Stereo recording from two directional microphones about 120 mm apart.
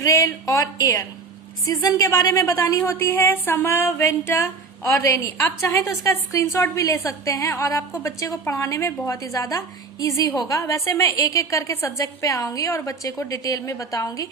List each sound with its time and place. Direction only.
0.0 s a woman's voice: 30° left (ahead or behind)